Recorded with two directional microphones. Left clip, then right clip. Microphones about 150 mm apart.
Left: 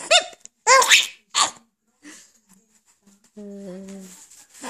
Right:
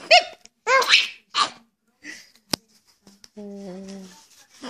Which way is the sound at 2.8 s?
15° left (ahead or behind).